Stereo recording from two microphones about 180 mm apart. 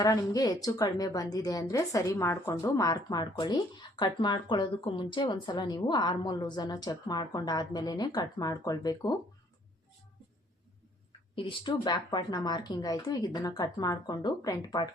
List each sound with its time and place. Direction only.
0.0 s a woman's voice: 20° left (ahead or behind)
11.3 s a woman's voice: 25° left (ahead or behind)